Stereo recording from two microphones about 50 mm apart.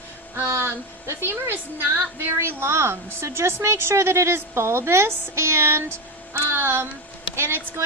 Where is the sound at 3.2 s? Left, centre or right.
Right.